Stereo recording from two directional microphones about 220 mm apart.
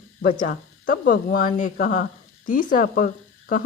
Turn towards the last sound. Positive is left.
turn(degrees=40)  # may be behind; listen again after turning